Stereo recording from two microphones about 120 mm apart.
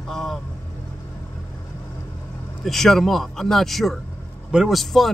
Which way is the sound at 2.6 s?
Centre (ahead or behind).